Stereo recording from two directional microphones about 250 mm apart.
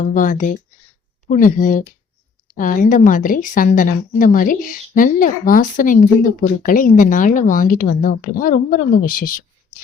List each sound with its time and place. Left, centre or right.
0.0 s speech: left